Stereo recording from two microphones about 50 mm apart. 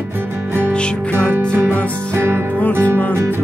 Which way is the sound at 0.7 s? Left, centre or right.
Centre.